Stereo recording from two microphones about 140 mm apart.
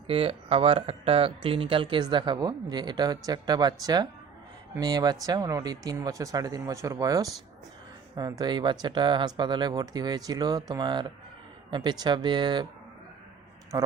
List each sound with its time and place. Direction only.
0.1 s speech: 45° right (ahead or behind)
13.7 s speech: 30° right (ahead or behind)